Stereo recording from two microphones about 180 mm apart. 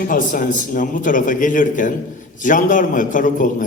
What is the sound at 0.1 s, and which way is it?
A man's voice, 50° left (ahead or behind).